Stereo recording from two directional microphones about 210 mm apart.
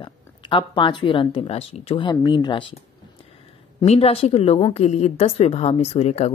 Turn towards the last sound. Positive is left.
turn(degrees=30)  # may be behind; listen again after turning